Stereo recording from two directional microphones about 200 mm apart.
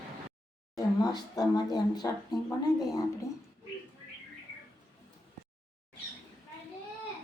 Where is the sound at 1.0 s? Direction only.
20° left (ahead or behind).